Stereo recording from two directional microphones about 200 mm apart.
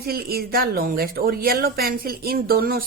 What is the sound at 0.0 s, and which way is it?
A woman's voice, 50° right (ahead or behind).